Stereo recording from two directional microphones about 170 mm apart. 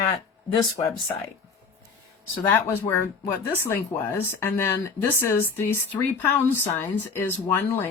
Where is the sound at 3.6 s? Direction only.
15° left (ahead or behind).